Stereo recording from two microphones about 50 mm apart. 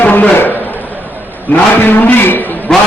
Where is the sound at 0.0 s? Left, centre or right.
Left.